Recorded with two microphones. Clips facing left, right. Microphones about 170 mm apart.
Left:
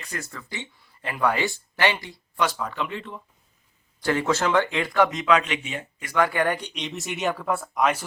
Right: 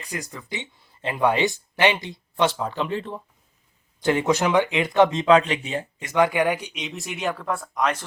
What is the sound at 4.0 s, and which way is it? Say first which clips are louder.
Speech: right 3 dB; 20° right (ahead or behind).